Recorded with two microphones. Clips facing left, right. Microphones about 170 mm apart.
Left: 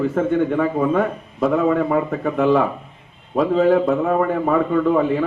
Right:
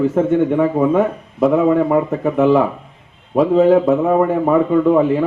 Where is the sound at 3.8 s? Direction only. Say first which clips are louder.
Right 4 dB; 10° right (ahead or behind).